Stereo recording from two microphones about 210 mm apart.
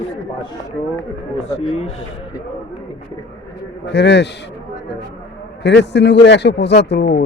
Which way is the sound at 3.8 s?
55° left (ahead or behind).